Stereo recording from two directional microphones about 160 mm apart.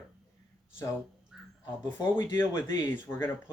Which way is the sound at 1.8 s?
15° left (ahead or behind).